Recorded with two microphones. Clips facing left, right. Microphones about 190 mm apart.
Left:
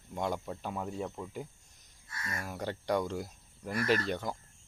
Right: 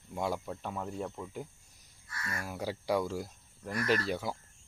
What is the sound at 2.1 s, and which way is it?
Speech, 20° left (ahead or behind).